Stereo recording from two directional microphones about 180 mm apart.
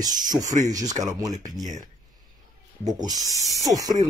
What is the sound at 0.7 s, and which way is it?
Speech, 20° right (ahead or behind).